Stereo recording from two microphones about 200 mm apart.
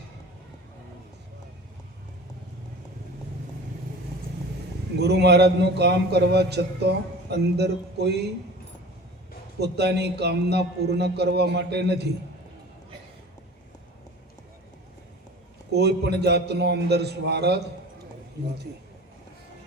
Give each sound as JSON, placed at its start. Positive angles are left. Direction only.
{"t": 4.9, "sound": "a man's voice", "side_deg": -55}
{"t": 9.6, "sound": "a man's voice", "side_deg": -55}
{"t": 15.7, "sound": "a man's voice", "side_deg": -55}